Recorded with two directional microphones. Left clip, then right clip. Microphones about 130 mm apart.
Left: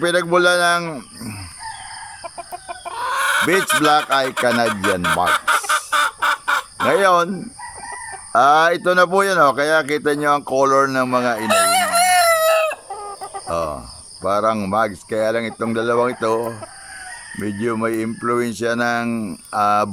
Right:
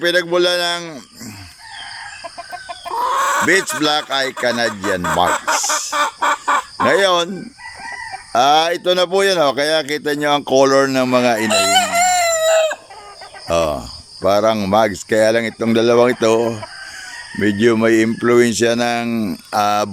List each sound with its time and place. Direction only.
0.0 s a man's voice: centre (ahead or behind)
2.9 s chicken: 60° right (ahead or behind)
3.8 s a man's voice: centre (ahead or behind)
4.7 s speech: 55° right (ahead or behind)
5.9 s chicken: 50° right (ahead or behind)
6.8 s a man's voice: centre (ahead or behind)
8.3 s speech: 5° right (ahead or behind)
13.5 s cricket: 5° right (ahead or behind)
14.3 s speech: 5° right (ahead or behind)